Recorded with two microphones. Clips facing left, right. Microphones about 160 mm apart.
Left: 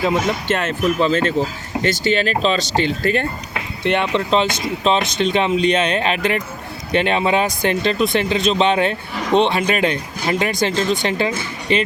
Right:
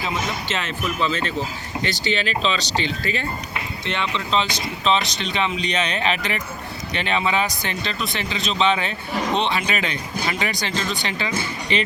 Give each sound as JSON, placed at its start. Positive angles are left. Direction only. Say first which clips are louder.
{"t": 0.0, "sound": "speech", "louder": "left 8 dB", "side_deg": 55}